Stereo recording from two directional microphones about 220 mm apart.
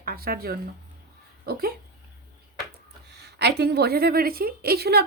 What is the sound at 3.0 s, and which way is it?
A woman's voice, 50° right (ahead or behind).